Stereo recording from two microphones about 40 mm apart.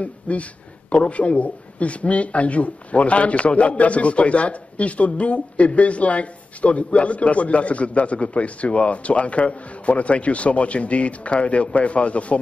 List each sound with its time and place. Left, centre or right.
0.0 s a man's voice: left